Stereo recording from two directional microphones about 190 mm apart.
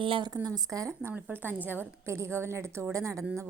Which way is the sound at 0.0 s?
25° right (ahead or behind).